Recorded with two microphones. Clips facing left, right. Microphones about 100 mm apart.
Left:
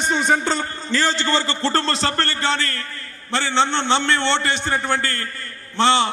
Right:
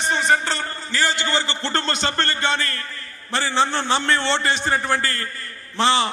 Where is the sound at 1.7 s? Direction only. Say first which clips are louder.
Left 3 dB; 35° left (ahead or behind).